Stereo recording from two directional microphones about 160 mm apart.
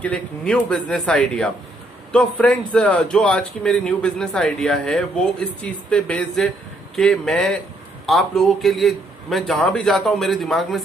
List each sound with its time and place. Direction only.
0.0 s a man's voice: 5° left (ahead or behind)